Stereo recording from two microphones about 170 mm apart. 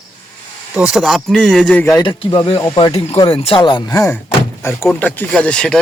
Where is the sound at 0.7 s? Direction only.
5° right (ahead or behind).